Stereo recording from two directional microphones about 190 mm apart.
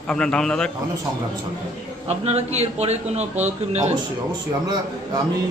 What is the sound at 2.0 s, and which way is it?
A man's voice, 35° right (ahead or behind).